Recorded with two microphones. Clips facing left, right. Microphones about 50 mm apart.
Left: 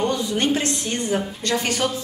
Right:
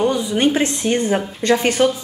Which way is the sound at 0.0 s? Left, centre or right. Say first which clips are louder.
Right 4 dB; centre.